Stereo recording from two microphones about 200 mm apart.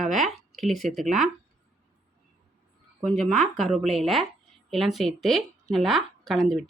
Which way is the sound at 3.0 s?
Centre (ahead or behind).